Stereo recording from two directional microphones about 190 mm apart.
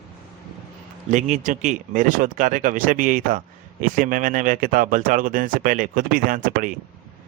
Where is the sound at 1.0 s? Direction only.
40° right (ahead or behind).